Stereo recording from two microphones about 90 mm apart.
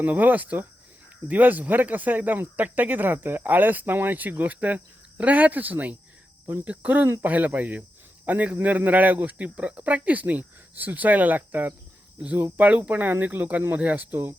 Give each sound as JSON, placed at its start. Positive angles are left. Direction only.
{"t": 0.0, "sound": "speech", "side_deg": -20}